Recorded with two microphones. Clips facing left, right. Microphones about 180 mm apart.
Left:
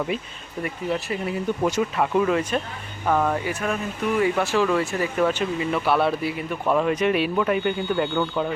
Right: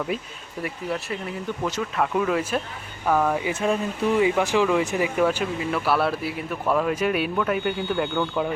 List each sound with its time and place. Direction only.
0.6 s speech: centre (ahead or behind)
1.6 s speech: 10° left (ahead or behind)
2.1 s speech: centre (ahead or behind)
3.4 s speech: 25° right (ahead or behind)
4.2 s speech: 15° right (ahead or behind); by 8.3 s 5° left (ahead or behind)